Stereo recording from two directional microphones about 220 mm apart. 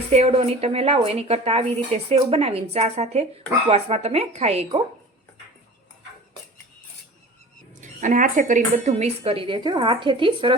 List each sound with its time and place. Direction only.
0.1 s speech: 30° right (ahead or behind)
7.8 s speech: 35° right (ahead or behind)